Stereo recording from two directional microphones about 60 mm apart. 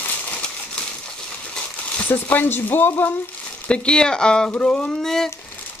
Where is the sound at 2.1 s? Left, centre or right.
Left.